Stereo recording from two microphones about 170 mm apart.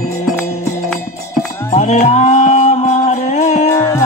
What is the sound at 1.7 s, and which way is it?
Music, 45° left (ahead or behind).